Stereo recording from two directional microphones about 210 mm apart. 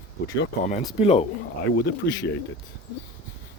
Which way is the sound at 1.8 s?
55° left (ahead or behind).